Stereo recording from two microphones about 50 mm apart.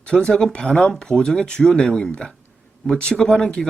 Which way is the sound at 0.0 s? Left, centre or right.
Centre.